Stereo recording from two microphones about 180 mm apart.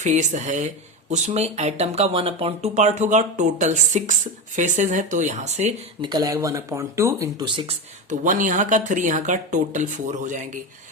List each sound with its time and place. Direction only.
0.0 s speech: 40° right (ahead or behind)
6.0 s speech: 25° right (ahead or behind)
8.2 s speech: 45° right (ahead or behind)